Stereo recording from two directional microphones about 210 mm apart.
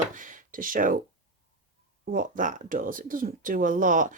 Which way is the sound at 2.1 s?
40° right (ahead or behind).